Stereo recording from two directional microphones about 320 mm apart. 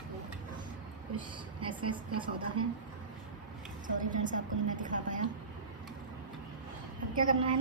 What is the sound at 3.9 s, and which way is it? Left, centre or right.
A woman's voice, right.